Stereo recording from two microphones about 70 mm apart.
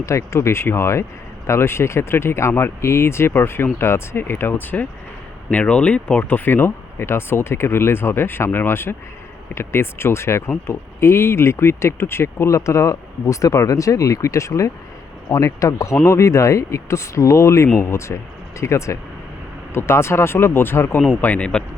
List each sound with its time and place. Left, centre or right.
0.0 s speech: left
21.2 s speech: left